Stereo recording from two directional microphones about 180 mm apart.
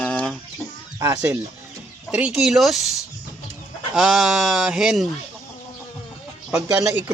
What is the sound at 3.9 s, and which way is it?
Speech, centre (ahead or behind).